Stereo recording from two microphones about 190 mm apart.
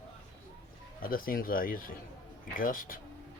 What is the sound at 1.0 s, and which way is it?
Speech, 50° left (ahead or behind).